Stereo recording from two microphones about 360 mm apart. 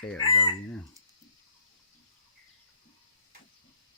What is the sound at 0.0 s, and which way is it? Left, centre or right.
Chicken, centre.